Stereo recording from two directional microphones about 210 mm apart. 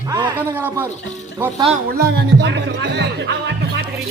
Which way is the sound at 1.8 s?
50° right (ahead or behind).